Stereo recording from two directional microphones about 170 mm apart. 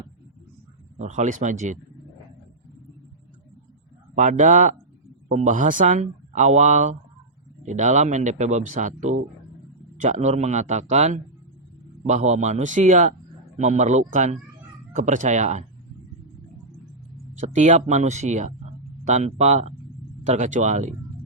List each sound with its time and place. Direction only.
0.9 s speech: 45° right (ahead or behind)
4.1 s speech: 45° right (ahead or behind)
17.5 s speech: 45° right (ahead or behind)